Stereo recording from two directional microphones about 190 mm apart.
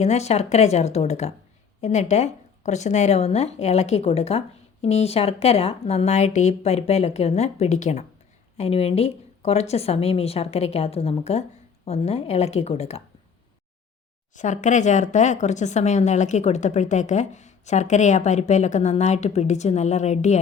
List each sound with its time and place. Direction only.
0.0 s speech: 35° left (ahead or behind)
14.3 s speech: 40° left (ahead or behind)